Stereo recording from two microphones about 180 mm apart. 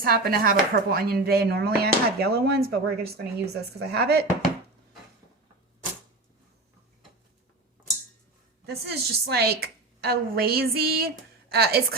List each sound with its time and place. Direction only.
0.0 s speech: 55° right (ahead or behind)
8.6 s speech: 65° right (ahead or behind)